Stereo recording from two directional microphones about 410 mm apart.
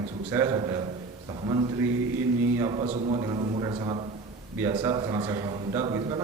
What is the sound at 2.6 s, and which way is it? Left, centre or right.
A man's voice, centre.